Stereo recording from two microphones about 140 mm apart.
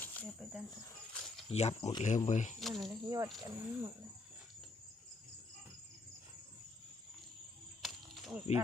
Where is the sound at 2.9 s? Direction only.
25° right (ahead or behind).